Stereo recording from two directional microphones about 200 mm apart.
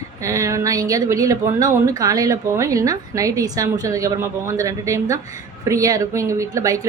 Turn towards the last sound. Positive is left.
turn(degrees=-15)  # may be behind; listen again after turning